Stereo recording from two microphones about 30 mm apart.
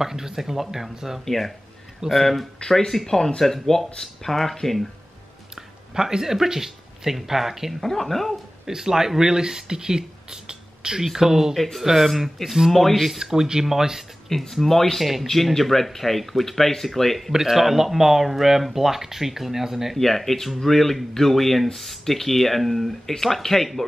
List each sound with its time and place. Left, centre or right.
0.0 s speech: centre
1.2 s speech: centre
5.9 s speech: centre
7.8 s speech: centre
8.6 s speech: centre
11.1 s speech: centre
11.5 s speech: centre
11.8 s speech: centre
12.4 s speech: centre
13.2 s speech: centre
14.5 s speech: centre
17.3 s speech: centre
20.0 s speech: centre